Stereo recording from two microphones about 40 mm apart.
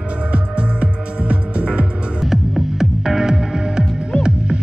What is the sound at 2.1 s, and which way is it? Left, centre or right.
Music, centre.